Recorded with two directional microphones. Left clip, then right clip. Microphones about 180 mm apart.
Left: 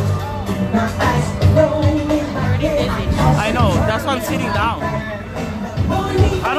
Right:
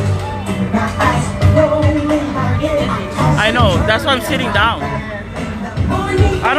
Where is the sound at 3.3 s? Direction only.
15° right (ahead or behind).